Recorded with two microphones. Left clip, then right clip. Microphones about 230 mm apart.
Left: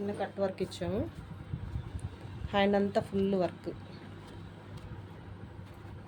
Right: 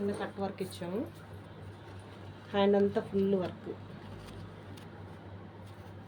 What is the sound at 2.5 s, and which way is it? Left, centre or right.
Speech, left.